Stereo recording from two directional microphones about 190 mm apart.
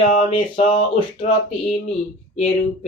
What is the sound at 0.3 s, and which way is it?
Speech, 30° left (ahead or behind).